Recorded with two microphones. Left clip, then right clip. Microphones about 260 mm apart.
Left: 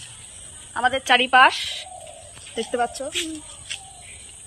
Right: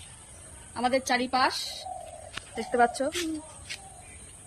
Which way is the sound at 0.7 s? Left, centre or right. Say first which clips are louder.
Left 7 dB; left.